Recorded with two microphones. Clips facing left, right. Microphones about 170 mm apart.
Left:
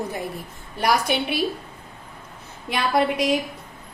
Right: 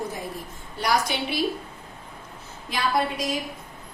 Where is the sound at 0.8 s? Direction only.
60° left (ahead or behind).